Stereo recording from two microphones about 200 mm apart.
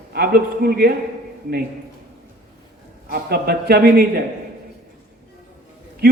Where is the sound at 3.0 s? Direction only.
50° right (ahead or behind).